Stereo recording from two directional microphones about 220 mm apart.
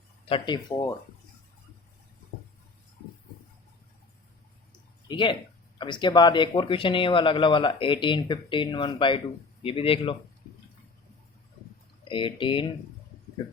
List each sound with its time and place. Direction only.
0.3 s speech: 20° left (ahead or behind)
5.0 s speech: 20° left (ahead or behind)
12.0 s speech: 20° left (ahead or behind)